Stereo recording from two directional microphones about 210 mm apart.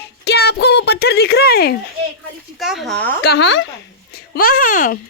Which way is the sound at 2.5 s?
Centre (ahead or behind).